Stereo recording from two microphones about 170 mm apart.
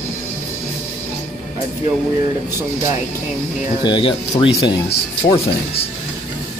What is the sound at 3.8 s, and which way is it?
Speech, 30° left (ahead or behind).